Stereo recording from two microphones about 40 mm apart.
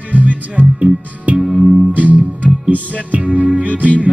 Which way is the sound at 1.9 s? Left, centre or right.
Right.